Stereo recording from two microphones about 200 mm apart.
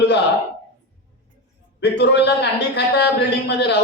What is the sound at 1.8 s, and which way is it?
Speech, 60° left (ahead or behind).